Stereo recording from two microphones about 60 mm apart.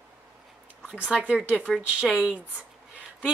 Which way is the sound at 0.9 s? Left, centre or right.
Centre.